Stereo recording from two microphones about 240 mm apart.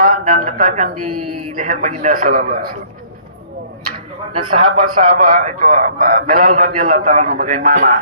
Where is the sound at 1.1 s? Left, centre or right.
Right.